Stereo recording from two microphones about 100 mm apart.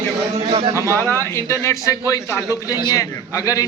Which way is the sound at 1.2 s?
30° left (ahead or behind).